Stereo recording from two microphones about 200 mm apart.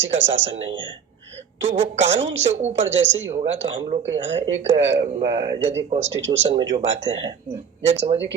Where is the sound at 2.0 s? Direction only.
65° right (ahead or behind).